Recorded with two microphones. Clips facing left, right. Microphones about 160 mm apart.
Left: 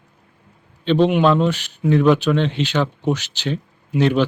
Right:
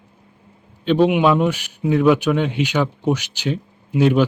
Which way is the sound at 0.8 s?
10° right (ahead or behind).